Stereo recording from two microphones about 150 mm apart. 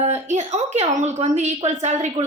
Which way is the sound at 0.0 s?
50° right (ahead or behind).